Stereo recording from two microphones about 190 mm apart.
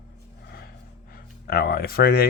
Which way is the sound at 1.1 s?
55° left (ahead or behind).